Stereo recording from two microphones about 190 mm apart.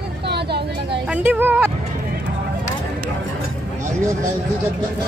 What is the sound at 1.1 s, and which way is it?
Speech, 10° right (ahead or behind).